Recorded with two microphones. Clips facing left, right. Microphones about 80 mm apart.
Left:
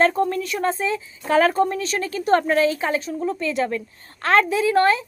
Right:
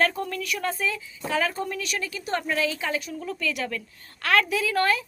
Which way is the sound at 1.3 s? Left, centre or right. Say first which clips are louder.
Left 9 dB; left.